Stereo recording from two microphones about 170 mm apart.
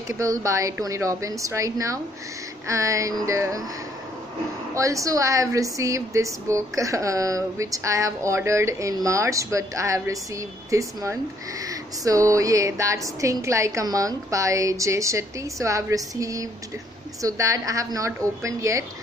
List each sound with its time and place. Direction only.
0.2 s speech: 20° right (ahead or behind)
2.7 s music: 20° right (ahead or behind)
4.7 s speech: 20° right (ahead or behind)